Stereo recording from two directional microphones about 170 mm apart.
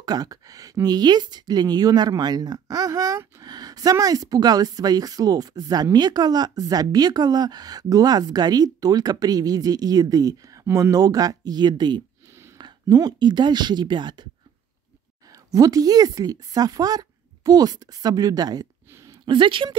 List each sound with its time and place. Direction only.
0.0 s speech: 20° right (ahead or behind)
15.3 s speech: 20° right (ahead or behind)
19.2 s speech: 30° right (ahead or behind)